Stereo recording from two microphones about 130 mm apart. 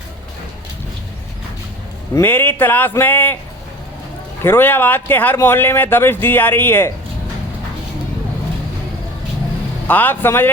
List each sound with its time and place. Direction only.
2.1 s speech: 15° left (ahead or behind)
4.4 s speech: 15° left (ahead or behind)
9.8 s speech: 15° left (ahead or behind)